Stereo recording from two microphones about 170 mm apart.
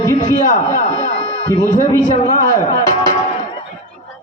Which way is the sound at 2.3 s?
20° left (ahead or behind).